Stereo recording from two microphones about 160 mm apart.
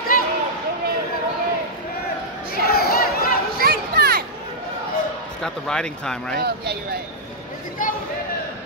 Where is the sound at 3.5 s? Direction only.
75° right (ahead or behind).